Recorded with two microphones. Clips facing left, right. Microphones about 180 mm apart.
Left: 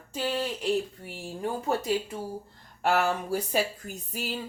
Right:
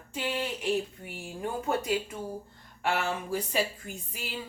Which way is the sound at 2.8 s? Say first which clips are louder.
Left 5 dB; 40° left (ahead or behind).